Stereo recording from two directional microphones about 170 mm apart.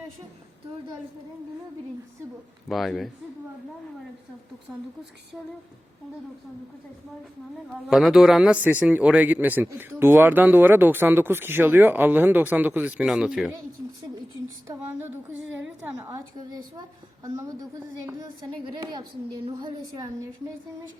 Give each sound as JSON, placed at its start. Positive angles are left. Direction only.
{"t": 2.6, "sound": "speech", "side_deg": 0}
{"t": 7.9, "sound": "a man's voice", "side_deg": 0}
{"t": 14.7, "sound": "a man's voice", "side_deg": -15}
{"t": 17.2, "sound": "a woman's voice", "side_deg": -20}